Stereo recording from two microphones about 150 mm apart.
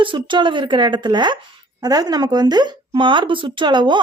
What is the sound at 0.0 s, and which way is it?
Speech, 35° right (ahead or behind).